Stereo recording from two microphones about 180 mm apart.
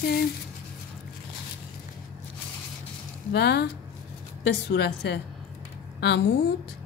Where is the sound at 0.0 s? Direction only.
65° left (ahead or behind).